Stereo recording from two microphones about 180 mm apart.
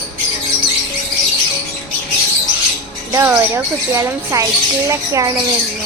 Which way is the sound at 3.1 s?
15° right (ahead or behind).